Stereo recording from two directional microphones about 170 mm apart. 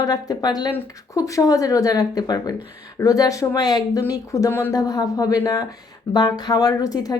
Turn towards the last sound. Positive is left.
turn(degrees=20)  # may be behind; listen again after turning